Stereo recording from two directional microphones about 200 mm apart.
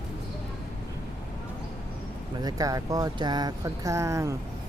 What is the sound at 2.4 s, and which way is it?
Speech, 15° right (ahead or behind).